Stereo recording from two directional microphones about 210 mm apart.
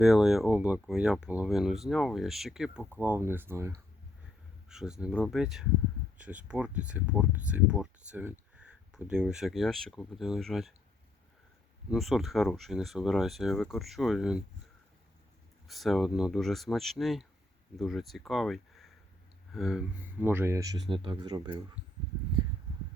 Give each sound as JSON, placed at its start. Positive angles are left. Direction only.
{"t": 0.0, "sound": "speech", "side_deg": 0}
{"t": 11.9, "sound": "speech", "side_deg": 0}
{"t": 15.6, "sound": "speech", "side_deg": 0}